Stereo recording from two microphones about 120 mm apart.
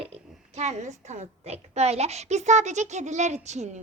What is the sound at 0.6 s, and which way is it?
A woman's voice, 70° right (ahead or behind).